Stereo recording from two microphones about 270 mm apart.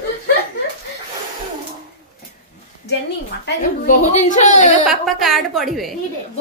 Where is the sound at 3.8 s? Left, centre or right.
Left.